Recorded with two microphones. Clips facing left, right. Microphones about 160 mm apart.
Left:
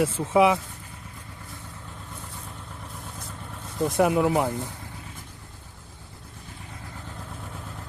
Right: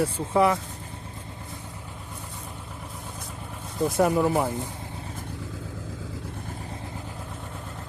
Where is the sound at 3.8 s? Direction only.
Centre (ahead or behind).